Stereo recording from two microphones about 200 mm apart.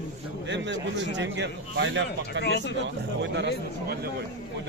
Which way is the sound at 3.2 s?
55° right (ahead or behind).